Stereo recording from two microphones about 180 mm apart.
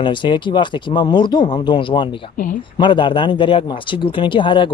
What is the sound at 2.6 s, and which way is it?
Speech, 25° left (ahead or behind).